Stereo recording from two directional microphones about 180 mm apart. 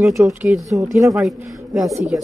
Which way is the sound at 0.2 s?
10° right (ahead or behind).